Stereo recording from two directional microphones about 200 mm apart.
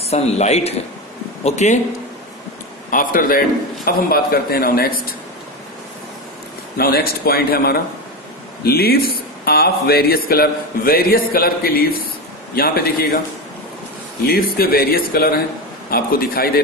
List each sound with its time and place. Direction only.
0.1 s speech: 30° left (ahead or behind)
2.9 s a man's voice: 45° left (ahead or behind)
6.8 s a man's voice: 50° left (ahead or behind)
14.2 s a man's voice: 50° left (ahead or behind)